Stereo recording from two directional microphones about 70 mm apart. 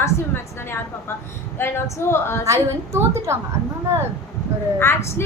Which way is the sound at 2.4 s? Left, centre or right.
Right.